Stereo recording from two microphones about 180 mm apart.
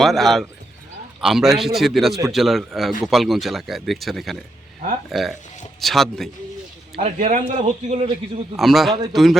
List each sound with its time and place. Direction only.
0.0 s speech: centre (ahead or behind)
6.9 s speech: 40° right (ahead or behind)
8.5 s speech: centre (ahead or behind)